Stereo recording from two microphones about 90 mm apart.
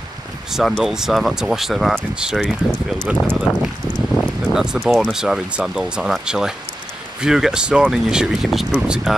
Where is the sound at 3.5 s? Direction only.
35° left (ahead or behind).